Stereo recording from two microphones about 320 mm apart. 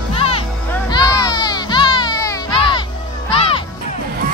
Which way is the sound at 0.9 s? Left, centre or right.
Centre.